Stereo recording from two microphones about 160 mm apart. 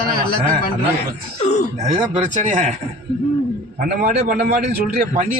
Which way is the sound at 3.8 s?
65° right (ahead or behind).